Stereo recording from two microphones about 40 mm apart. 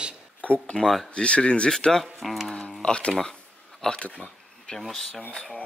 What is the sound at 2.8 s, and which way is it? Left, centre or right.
Speech, left.